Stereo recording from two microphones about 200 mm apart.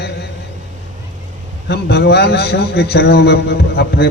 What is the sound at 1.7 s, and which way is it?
A man's voice, 55° left (ahead or behind).